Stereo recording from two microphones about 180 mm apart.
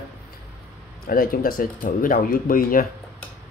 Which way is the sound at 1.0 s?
55° left (ahead or behind).